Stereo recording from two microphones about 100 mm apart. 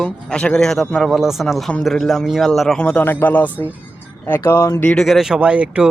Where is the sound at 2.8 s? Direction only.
15° left (ahead or behind).